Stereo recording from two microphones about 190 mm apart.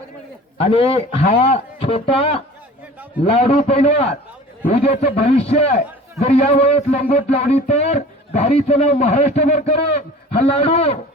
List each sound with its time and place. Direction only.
0.6 s a man's voice: 30° left (ahead or behind)